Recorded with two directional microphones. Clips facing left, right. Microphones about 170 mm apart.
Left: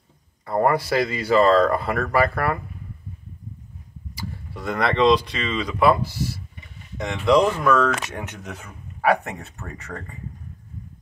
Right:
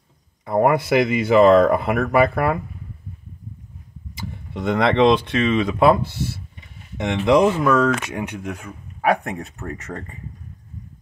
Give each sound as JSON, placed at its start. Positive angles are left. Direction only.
{"t": 0.5, "sound": "speech", "side_deg": -20}
{"t": 4.2, "sound": "speech", "side_deg": -20}
{"t": 7.8, "sound": "speech", "side_deg": -10}
{"t": 9.9, "sound": "speech", "side_deg": -15}